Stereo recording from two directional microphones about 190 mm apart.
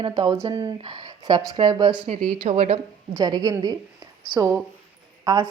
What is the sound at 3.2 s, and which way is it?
A woman's voice, 20° right (ahead or behind).